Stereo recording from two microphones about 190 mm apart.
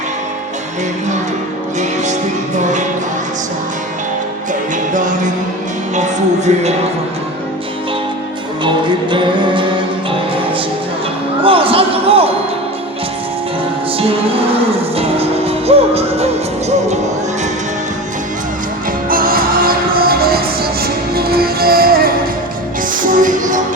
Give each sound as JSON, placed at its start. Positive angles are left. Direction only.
{"t": 4.9, "sound": "music", "side_deg": -40}
{"t": 8.6, "sound": "music", "side_deg": -25}
{"t": 11.4, "sound": "a sound", "side_deg": -30}
{"t": 14.9, "sound": "music", "side_deg": -30}
{"t": 19.0, "sound": "music", "side_deg": -50}